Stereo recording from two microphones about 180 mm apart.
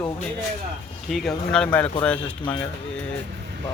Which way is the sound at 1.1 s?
Centre (ahead or behind).